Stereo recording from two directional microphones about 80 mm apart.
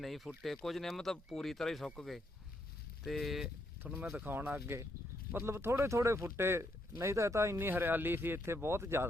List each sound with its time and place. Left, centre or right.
0.0 s speech: centre
4.2 s speech: right
7.7 s speech: right